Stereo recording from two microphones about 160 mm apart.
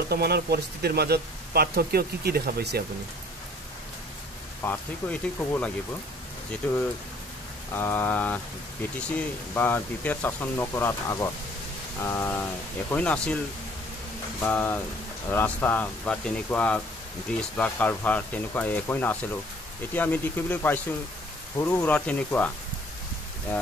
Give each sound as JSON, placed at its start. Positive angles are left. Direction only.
{"t": 0.1, "sound": "speech", "side_deg": -85}
{"t": 4.6, "sound": "speech", "side_deg": 10}
{"t": 14.4, "sound": "speech", "side_deg": 10}